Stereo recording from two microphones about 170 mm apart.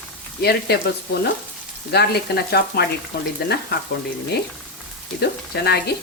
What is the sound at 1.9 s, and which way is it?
Frying, 75° left (ahead or behind).